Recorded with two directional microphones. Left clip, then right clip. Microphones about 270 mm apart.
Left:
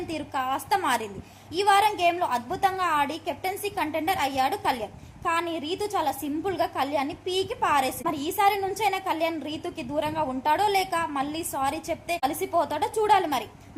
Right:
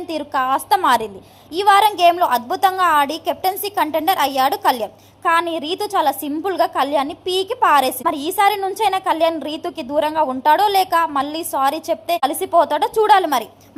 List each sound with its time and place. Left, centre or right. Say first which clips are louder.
0.1 s a woman's voice: right 11 dB; centre